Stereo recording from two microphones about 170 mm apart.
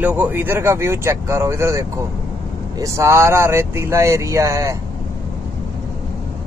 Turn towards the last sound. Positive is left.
turn(degrees=-20)  # may be behind; listen again after turning